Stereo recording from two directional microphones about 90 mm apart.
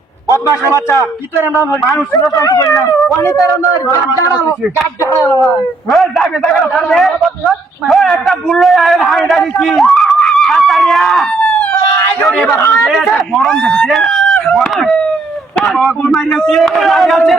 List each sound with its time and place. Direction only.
0.5 s speech: 35° left (ahead or behind)
2.3 s speech: 35° left (ahead or behind)
5.1 s speech: 30° left (ahead or behind)
5.9 s a man's voice: centre (ahead or behind)
12.5 s speech: 35° left (ahead or behind)
13.1 s speech: centre (ahead or behind)